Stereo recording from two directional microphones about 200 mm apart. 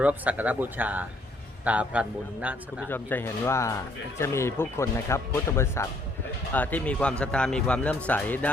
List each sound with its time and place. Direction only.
0.0 s speech: 5° right (ahead or behind)
2.9 s speech: 10° left (ahead or behind)